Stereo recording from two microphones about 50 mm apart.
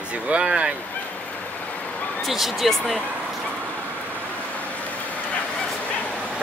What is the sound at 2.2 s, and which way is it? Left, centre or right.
Speech, centre.